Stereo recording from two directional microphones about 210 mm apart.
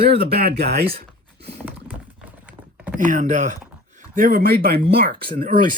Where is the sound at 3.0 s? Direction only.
40° right (ahead or behind).